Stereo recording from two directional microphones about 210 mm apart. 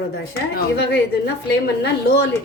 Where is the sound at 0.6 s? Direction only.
50° left (ahead or behind).